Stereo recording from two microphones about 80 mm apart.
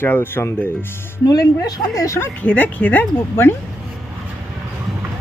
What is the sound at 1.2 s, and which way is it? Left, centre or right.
Speech, left.